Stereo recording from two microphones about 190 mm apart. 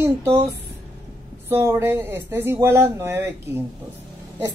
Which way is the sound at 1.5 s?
10° right (ahead or behind).